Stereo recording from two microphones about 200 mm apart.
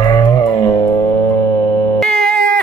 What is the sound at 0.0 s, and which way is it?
Music, 20° left (ahead or behind).